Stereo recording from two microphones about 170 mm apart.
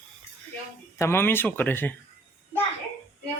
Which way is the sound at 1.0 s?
15° left (ahead or behind).